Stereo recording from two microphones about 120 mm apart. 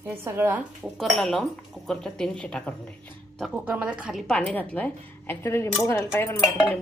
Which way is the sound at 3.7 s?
10° right (ahead or behind).